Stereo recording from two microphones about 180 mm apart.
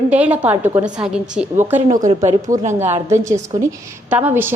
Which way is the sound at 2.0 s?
45° right (ahead or behind).